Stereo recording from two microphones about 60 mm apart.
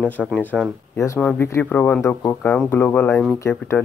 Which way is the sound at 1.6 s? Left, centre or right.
Left.